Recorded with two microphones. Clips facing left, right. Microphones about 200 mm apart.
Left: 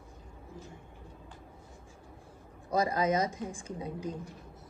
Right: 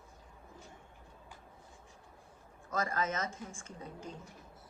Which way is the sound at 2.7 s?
15° left (ahead or behind).